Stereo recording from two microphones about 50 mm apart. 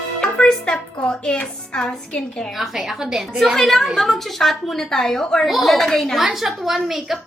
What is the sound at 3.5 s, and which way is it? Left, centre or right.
A woman's voice, centre.